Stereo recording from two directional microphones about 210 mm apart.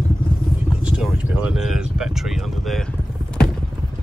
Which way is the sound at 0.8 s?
5° right (ahead or behind).